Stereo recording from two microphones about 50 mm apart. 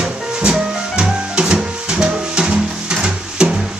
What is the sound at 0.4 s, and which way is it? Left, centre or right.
Music, centre.